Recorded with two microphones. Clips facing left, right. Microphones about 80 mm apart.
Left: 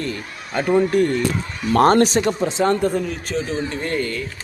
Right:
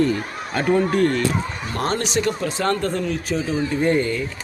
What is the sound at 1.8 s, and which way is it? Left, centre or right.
Speech, left.